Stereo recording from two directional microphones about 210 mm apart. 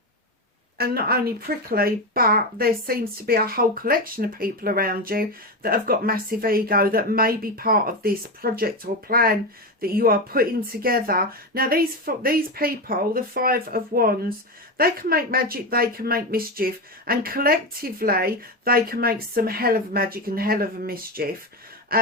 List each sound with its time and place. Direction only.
0.8 s speech: 45° right (ahead or behind)